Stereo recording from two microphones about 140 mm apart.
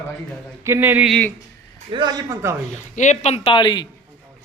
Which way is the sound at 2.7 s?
60° left (ahead or behind).